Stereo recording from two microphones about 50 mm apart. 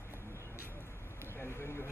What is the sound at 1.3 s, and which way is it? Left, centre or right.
Speech, left.